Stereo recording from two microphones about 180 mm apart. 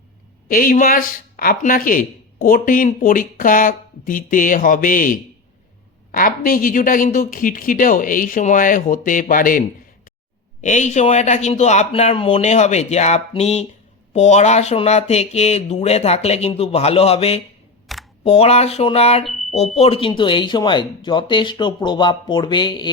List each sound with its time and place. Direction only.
0.4 s speech: 50° left (ahead or behind); by 17.4 s 35° left (ahead or behind)
17.9 s camera: centre (ahead or behind)
18.3 s speech: 35° left (ahead or behind)